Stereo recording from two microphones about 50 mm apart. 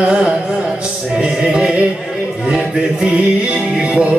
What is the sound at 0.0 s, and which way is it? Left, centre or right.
Music, right.